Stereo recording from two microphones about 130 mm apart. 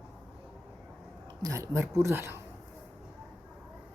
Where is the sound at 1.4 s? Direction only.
25° right (ahead or behind).